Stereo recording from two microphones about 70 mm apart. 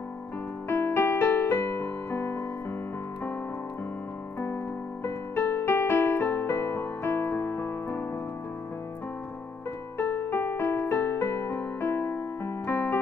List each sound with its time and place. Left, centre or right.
0.7 s piano: left
5.0 s music: left
9.9 s music: left
12.6 s keyboard: left